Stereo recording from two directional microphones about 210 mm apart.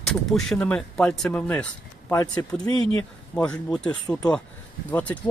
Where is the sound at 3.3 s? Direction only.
5° left (ahead or behind).